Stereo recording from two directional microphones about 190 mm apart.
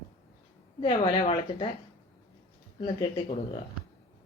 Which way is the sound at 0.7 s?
25° left (ahead or behind).